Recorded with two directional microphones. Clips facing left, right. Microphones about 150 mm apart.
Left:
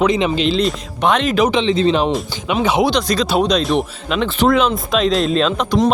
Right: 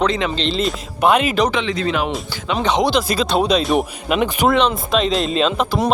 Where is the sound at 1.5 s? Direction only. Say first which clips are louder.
Left 5 dB; 25° left (ahead or behind).